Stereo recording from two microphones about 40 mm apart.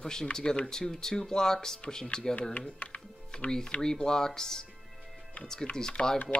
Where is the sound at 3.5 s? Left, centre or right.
Centre.